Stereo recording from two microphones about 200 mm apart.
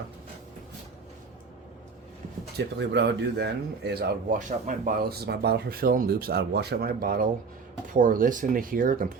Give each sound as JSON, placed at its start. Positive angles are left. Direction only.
{"t": 2.6, "sound": "speech", "side_deg": -60}
{"t": 4.4, "sound": "speech", "side_deg": -40}